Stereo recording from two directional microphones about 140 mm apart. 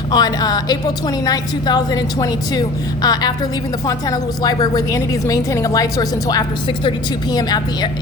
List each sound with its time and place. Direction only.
0.1 s a woman's voice: 25° left (ahead or behind)